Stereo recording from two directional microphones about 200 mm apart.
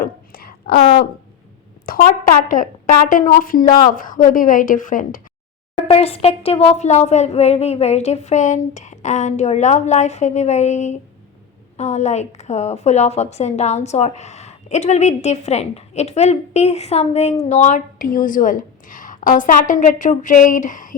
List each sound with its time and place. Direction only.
0.0 s a sound: 45° left (ahead or behind)
1.9 s a woman's voice: 45° left (ahead or behind)
5.7 s a woman's voice: 30° left (ahead or behind)